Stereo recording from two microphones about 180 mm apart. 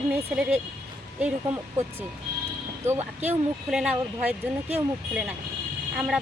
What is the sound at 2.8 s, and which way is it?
Speech, 40° right (ahead or behind).